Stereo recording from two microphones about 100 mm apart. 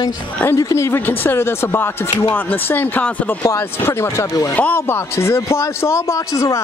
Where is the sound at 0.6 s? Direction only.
30° left (ahead or behind).